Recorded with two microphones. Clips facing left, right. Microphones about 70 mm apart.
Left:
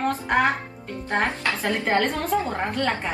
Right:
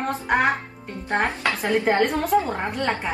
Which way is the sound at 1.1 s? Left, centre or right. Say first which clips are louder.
Right 1 dB; right.